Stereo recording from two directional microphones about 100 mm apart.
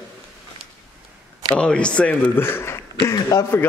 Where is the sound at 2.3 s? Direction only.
25° left (ahead or behind).